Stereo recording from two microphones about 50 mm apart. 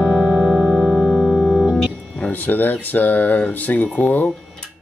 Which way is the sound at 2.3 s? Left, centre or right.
Left.